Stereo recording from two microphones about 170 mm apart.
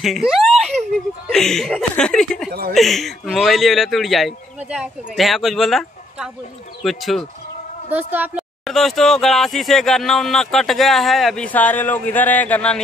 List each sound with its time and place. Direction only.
0.0 s speech: centre (ahead or behind)
0.6 s whimper: 40° right (ahead or behind)
1.3 s speech: centre (ahead or behind)
7.9 s a woman's voice: 10° right (ahead or behind)
8.6 s speech: centre (ahead or behind)